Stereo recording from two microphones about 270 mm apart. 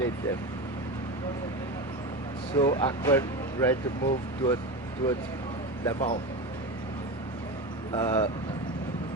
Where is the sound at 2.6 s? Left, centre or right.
Centre.